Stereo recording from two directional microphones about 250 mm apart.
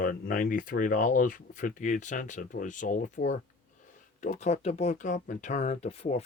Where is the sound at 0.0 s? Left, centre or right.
Left.